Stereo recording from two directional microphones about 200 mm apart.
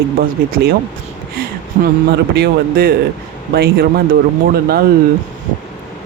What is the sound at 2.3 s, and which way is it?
Speech, 50° right (ahead or behind).